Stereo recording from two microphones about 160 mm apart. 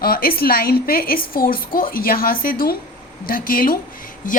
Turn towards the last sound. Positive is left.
turn(degrees=60)  # may be behind; listen again after turning